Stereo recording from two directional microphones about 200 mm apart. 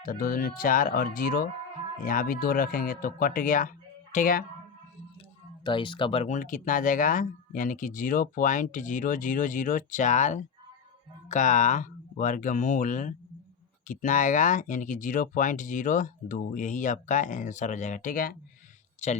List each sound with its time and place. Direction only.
0.0 s speech: 45° left (ahead or behind)
5.6 s speech: 25° left (ahead or behind); by 18.3 s 45° left (ahead or behind)